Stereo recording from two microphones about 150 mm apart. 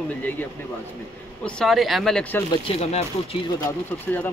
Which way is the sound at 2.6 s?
40° left (ahead or behind).